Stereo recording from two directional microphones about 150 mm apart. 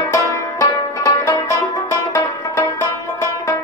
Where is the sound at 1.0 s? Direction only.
20° left (ahead or behind).